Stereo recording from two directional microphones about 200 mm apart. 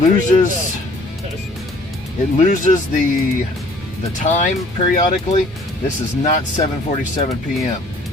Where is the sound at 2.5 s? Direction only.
40° left (ahead or behind).